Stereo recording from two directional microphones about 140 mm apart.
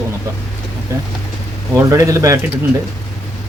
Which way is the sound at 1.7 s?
20° right (ahead or behind).